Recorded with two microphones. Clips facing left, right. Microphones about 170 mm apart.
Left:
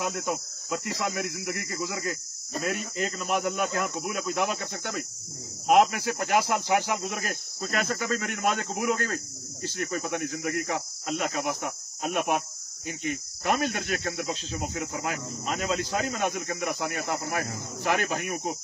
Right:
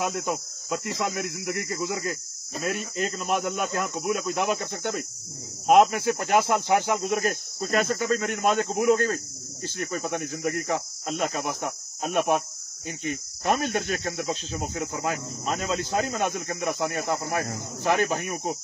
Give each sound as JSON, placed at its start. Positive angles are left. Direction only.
{"t": 0.0, "sound": "speech", "side_deg": -20}
{"t": 14.3, "sound": "speech", "side_deg": -45}